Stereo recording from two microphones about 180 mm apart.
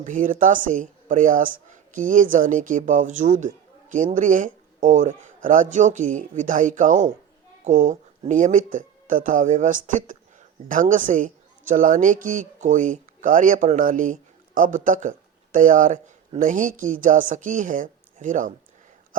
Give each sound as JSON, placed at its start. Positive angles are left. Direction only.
{"t": 0.0, "sound": "a woman's voice", "side_deg": -45}